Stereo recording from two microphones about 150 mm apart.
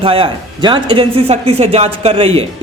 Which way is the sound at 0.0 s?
35° right (ahead or behind).